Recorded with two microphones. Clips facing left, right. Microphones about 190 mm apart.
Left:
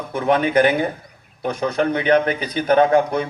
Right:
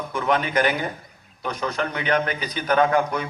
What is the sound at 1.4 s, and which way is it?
Speech, 50° left (ahead or behind).